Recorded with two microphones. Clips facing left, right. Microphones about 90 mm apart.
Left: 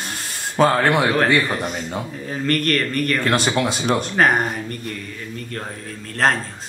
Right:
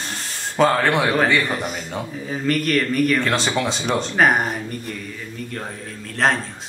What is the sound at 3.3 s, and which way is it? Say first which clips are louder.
Speech: left 2 dB; 10° left (ahead or behind).